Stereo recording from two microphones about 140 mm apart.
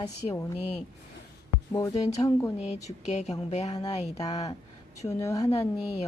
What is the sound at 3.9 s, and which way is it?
Speech, 50° left (ahead or behind).